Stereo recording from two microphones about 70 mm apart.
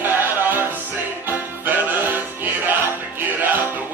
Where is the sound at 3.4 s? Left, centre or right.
Right.